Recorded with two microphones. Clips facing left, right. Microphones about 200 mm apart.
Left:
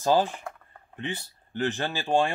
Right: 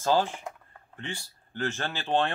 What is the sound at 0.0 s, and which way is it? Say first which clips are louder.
Speech: left 2 dB; 15° left (ahead or behind).